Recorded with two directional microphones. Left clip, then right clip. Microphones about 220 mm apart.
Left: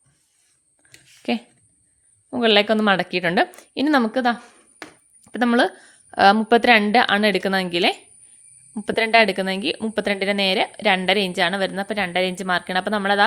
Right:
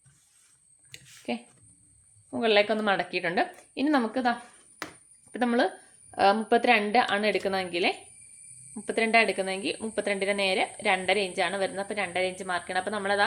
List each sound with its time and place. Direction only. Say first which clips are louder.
0.8 s a sound: right 1 dB; 50° left (ahead or behind)
1.3 s a woman's voice: left 9 dB; 50° left (ahead or behind)
5.2 s a woman's voice: left 7 dB; 35° left (ahead or behind)